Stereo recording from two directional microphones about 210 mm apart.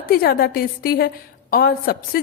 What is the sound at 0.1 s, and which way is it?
A woman's voice, 45° left (ahead or behind).